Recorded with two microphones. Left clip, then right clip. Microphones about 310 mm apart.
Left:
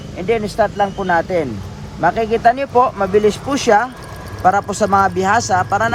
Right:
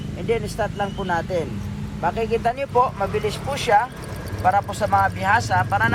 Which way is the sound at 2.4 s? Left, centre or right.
Left.